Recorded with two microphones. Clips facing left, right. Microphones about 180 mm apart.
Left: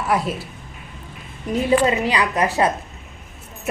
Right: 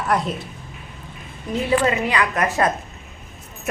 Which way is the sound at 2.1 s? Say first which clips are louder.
Left 1 dB; 15° left (ahead or behind).